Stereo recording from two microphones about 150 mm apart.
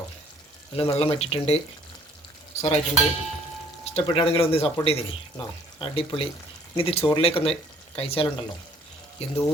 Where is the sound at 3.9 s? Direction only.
35° left (ahead or behind).